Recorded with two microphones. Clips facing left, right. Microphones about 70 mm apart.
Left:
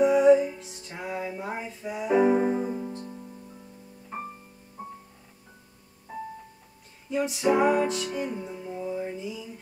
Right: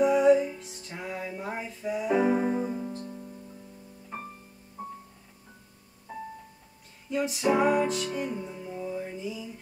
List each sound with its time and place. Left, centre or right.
0.0 s music: centre
4.8 s music: centre
7.1 s music: centre